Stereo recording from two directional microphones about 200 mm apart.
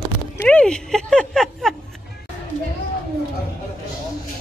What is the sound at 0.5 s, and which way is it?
Speech, 5° left (ahead or behind).